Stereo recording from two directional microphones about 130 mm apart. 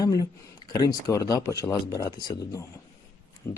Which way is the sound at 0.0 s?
30° left (ahead or behind).